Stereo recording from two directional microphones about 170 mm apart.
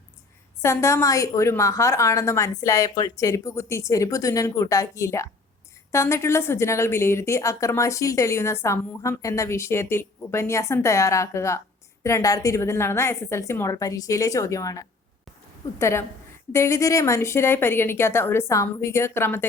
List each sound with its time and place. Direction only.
0.6 s a woman's voice: 15° left (ahead or behind)